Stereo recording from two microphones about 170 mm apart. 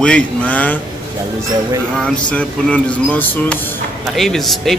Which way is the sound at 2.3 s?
5° left (ahead or behind).